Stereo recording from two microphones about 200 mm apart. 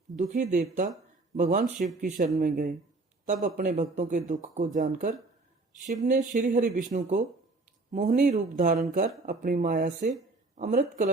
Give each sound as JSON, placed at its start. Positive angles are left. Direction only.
{"t": 0.2, "sound": "speech", "side_deg": -40}